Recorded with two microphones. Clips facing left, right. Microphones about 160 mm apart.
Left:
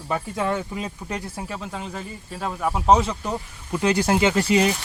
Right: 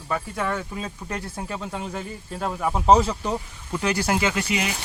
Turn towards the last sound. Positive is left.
turn(degrees=35)  # may be behind; listen again after turning